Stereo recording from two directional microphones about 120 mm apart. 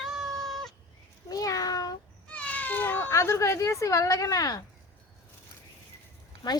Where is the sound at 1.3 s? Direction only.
30° left (ahead or behind).